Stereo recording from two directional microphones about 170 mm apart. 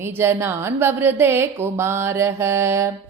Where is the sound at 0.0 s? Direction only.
15° right (ahead or behind).